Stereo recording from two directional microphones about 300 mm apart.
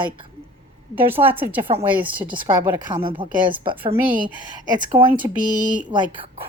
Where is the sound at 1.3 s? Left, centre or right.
Centre.